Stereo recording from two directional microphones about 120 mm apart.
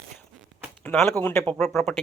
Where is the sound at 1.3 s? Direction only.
5° left (ahead or behind).